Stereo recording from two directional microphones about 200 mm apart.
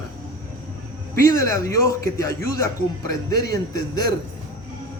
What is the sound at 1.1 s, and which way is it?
A man's voice, 15° left (ahead or behind).